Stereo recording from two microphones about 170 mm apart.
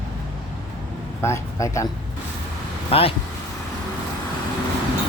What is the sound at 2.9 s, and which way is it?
Speech, 35° left (ahead or behind).